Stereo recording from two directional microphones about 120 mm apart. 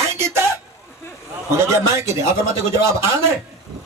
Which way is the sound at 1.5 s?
25° right (ahead or behind).